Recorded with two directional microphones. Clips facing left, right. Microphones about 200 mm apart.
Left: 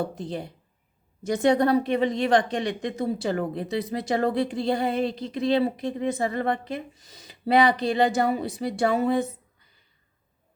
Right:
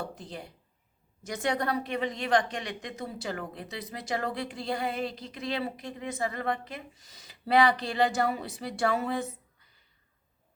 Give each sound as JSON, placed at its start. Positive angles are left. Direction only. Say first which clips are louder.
{"t": 0.0, "sound": "a woman's voice", "louder": "left 9 dB", "side_deg": 25}